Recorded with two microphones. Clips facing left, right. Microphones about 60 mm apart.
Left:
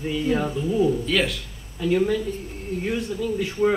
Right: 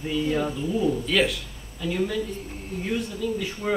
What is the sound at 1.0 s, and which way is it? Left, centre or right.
Speech, centre.